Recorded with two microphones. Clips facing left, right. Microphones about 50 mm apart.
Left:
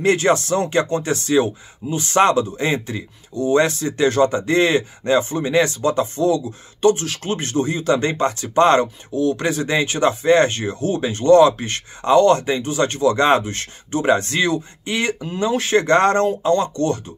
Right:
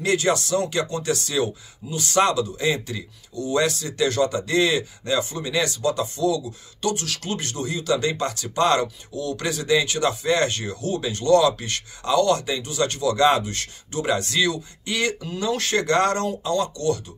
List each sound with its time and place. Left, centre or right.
0.0 s speech: left